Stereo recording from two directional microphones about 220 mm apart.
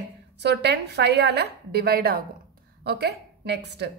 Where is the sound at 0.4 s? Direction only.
50° right (ahead or behind).